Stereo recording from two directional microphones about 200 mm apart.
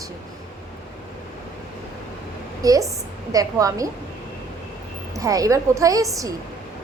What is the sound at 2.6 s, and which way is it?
A woman's voice, 15° right (ahead or behind).